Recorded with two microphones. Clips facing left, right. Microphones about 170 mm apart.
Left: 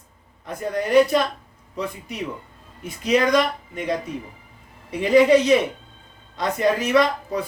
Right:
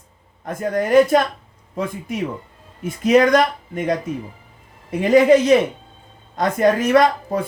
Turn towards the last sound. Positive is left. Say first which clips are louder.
# right 4 dB
turn(degrees=-55)  # may be behind; listen again after turning